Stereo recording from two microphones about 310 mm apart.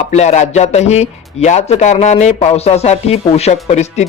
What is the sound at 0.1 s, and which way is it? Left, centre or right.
A man's voice, left.